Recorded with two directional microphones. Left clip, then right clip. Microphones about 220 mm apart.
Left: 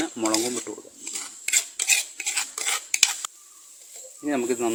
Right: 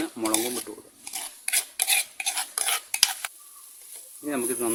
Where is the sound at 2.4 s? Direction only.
15° right (ahead or behind).